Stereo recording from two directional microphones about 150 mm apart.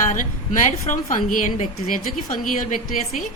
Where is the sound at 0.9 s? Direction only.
60° left (ahead or behind).